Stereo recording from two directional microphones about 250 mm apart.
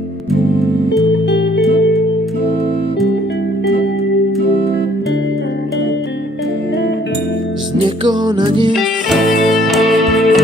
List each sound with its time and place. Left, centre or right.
7.8 s music: centre
8.7 s music: centre